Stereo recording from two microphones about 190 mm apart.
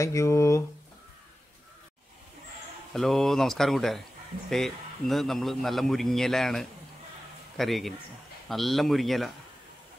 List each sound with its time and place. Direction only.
0.0 s speech: 15° left (ahead or behind)
2.9 s a man's voice: centre (ahead or behind)